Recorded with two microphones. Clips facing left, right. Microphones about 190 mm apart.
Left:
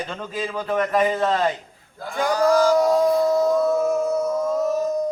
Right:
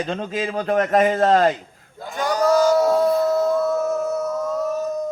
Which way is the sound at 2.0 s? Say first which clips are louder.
Even; 20° right (ahead or behind).